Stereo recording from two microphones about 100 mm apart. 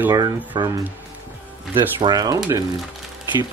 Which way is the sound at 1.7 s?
50° right (ahead or behind).